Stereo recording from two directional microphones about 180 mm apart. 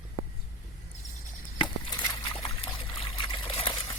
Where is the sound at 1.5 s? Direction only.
25° left (ahead or behind).